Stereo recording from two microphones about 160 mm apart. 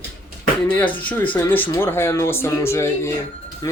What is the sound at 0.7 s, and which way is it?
Speech, 10° left (ahead or behind).